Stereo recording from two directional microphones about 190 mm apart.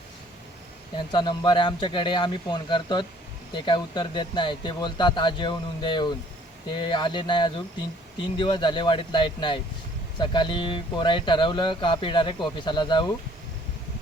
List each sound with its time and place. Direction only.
0.9 s speech: 25° left (ahead or behind)